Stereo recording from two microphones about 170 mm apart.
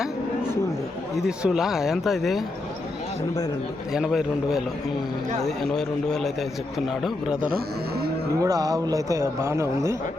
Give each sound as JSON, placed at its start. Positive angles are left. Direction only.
{"t": 1.1, "sound": "speech", "side_deg": -5}
{"t": 3.9, "sound": "speech", "side_deg": 0}
{"t": 8.4, "sound": "a man's voice", "side_deg": -20}